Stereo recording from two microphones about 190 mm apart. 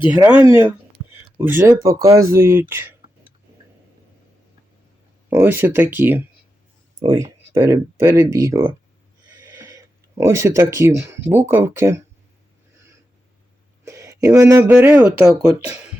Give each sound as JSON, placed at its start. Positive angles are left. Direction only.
{"t": 0.1, "sound": "speech", "side_deg": -5}
{"t": 5.3, "sound": "speech", "side_deg": -10}
{"t": 9.4, "sound": "a sound", "side_deg": -15}
{"t": 10.2, "sound": "speech", "side_deg": -15}
{"t": 13.8, "sound": "a sound", "side_deg": -15}
{"t": 14.2, "sound": "speech", "side_deg": -15}